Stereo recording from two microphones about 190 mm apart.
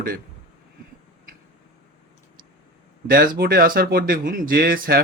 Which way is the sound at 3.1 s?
50° right (ahead or behind).